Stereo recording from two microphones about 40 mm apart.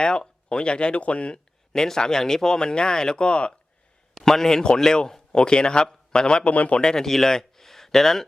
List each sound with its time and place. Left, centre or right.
0.0 s a man's voice: left
1.7 s speech: centre
4.1 s a man's voice: centre
6.5 s speech: left
6.8 s speech: centre